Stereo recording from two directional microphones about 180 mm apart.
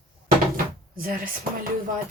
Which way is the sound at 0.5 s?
50° right (ahead or behind).